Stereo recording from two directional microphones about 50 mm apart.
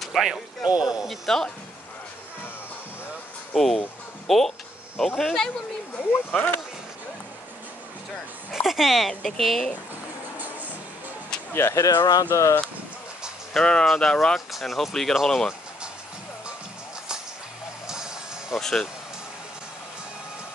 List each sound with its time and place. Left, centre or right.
0.2 s speech: centre
0.7 s speech: centre
1.0 s speech: centre
3.5 s speech: centre
5.9 s speech: left
8.5 s speech: centre
10.3 s music: right
11.5 s speech: left
12.3 s speech: left
13.5 s speech: centre
14.5 s speech: centre
17.8 s music: centre
18.6 s speech: centre